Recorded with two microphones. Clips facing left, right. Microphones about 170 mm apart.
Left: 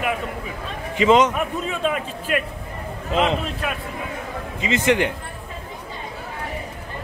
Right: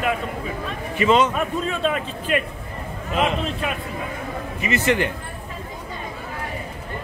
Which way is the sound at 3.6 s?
Centre (ahead or behind).